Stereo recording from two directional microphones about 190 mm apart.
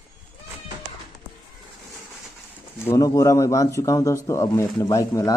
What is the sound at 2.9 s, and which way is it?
Speech, 15° left (ahead or behind).